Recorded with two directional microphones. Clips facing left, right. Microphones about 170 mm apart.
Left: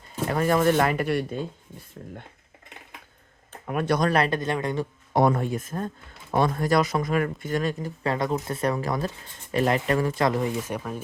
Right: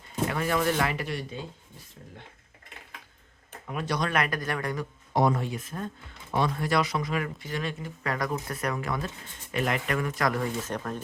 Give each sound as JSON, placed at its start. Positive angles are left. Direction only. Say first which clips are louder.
{"t": 0.3, "sound": "speech", "louder": "left 7 dB", "side_deg": 40}
{"t": 3.7, "sound": "speech", "louder": "left 6 dB", "side_deg": 55}
{"t": 4.1, "sound": "speech", "louder": "left 5 dB", "side_deg": 30}
{"t": 5.1, "sound": "speech", "louder": "left 3 dB", "side_deg": 55}